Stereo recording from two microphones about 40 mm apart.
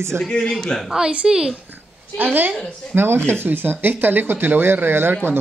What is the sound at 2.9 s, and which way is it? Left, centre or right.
Speech, right.